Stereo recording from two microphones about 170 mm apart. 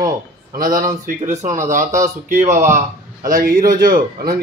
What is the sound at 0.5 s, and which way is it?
Speech, 55° right (ahead or behind).